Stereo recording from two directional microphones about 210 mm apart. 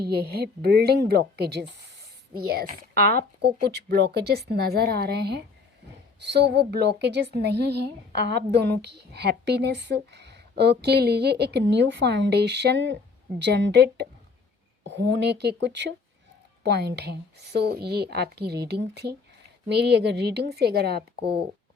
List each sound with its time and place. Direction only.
0.0 s a woman's voice: 50° right (ahead or behind)